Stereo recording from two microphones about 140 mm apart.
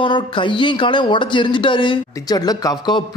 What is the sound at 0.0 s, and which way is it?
Speech, 35° left (ahead or behind).